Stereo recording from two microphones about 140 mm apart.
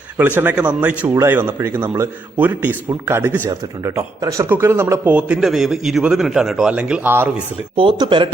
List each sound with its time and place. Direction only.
0.2 s speech: 15° right (ahead or behind)
1.0 s speech: 25° right (ahead or behind)
7.8 s speech: 35° right (ahead or behind)